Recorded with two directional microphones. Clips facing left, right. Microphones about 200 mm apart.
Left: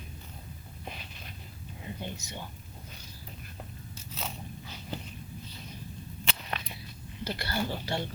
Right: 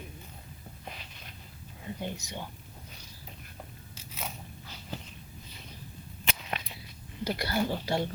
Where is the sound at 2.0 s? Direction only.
15° right (ahead or behind).